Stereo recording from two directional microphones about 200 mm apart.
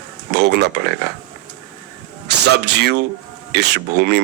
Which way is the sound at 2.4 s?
55° right (ahead or behind).